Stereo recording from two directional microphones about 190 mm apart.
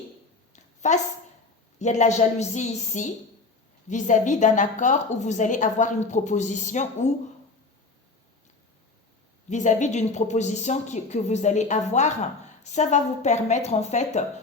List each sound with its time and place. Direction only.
0.5 s a sound: 40° left (ahead or behind)
1.8 s a woman's voice: 40° left (ahead or behind)
9.5 s a woman's voice: 40° left (ahead or behind)